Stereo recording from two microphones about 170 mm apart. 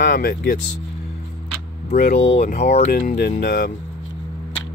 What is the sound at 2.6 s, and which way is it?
Speech, 40° left (ahead or behind).